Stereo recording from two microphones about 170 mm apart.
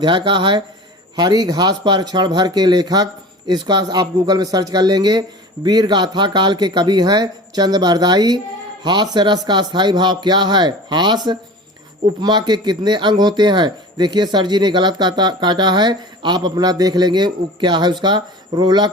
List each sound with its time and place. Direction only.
0.0 s a man's voice: 30° right (ahead or behind)
12.2 s a man's voice: 25° right (ahead or behind)